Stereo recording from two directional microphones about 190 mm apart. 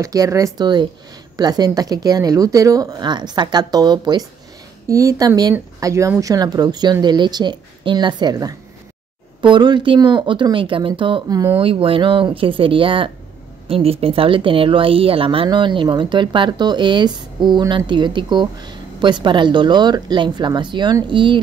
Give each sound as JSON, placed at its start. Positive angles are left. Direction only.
{"t": 0.0, "sound": "speech", "side_deg": -15}